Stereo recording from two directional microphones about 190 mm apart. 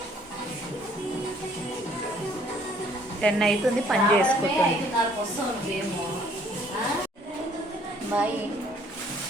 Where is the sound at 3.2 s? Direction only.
Centre (ahead or behind).